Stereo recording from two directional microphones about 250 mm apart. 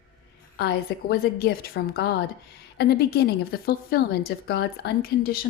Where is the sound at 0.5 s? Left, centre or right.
Left.